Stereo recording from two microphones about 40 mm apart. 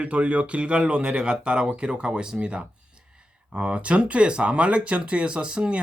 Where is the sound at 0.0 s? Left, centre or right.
Right.